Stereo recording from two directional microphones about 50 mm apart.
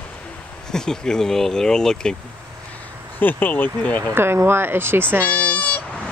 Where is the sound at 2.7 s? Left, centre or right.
Left.